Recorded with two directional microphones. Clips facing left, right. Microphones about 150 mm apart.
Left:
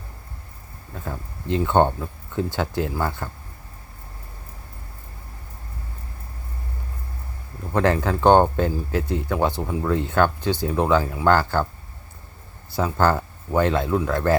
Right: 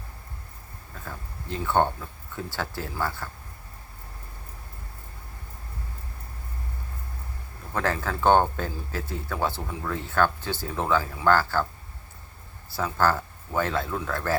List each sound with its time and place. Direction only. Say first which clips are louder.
1.6 s speech: left 4 dB; 20° left (ahead or behind)
7.7 s speech: left 7 dB; 20° left (ahead or behind)
12.7 s speech: left 4 dB; 20° left (ahead or behind)